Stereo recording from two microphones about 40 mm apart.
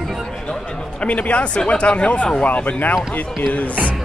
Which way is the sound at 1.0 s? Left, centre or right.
Left.